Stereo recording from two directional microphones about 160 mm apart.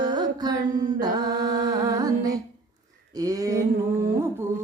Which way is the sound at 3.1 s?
20° right (ahead or behind).